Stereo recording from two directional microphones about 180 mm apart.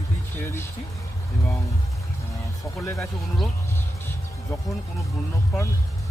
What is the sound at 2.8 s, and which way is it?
Speech, 15° left (ahead or behind).